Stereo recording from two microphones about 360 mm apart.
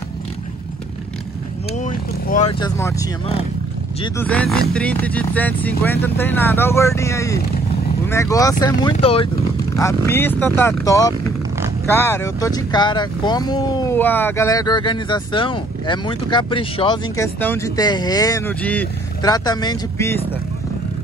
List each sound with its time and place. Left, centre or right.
1.7 s speech: left